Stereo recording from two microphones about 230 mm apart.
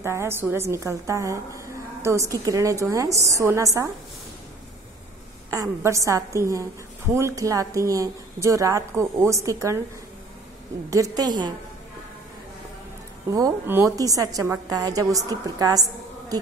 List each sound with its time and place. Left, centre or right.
0.0 s a woman's voice: centre
5.5 s a woman's voice: centre
10.9 s a woman's voice: centre
13.3 s a woman's voice: centre